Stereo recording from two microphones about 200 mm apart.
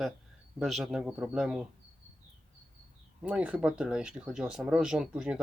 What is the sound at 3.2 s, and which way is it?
Speech, 5° right (ahead or behind).